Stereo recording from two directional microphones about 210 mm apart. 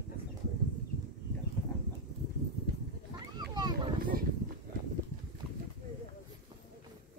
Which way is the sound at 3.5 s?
20° right (ahead or behind).